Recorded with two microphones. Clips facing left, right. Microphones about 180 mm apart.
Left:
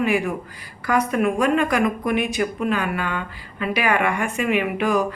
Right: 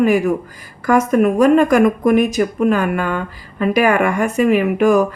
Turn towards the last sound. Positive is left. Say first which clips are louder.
# right 7 dB
turn(degrees=-45)  # may be behind; listen again after turning